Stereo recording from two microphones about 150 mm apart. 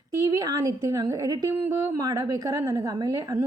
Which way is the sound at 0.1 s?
25° right (ahead or behind).